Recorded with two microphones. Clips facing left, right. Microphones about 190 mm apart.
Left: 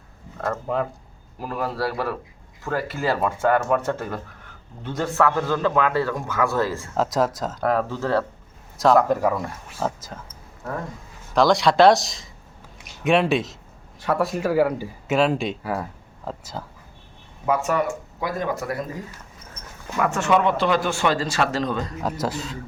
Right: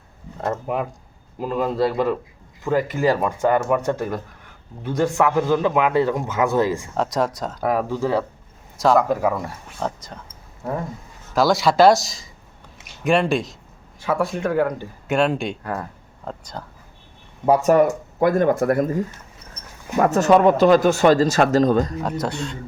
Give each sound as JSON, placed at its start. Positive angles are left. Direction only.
{"t": 0.3, "sound": "a man's voice", "side_deg": -20}
{"t": 6.9, "sound": "speech", "side_deg": 0}
{"t": 7.7, "sound": "a man's voice", "side_deg": -10}
{"t": 8.8, "sound": "speech", "side_deg": 0}
{"t": 11.3, "sound": "speech", "side_deg": 0}
{"t": 17.4, "sound": "speech", "side_deg": -40}
{"t": 19.6, "sound": "a sound", "side_deg": -35}
{"t": 20.0, "sound": "speech", "side_deg": -40}
{"t": 22.0, "sound": "speech", "side_deg": 0}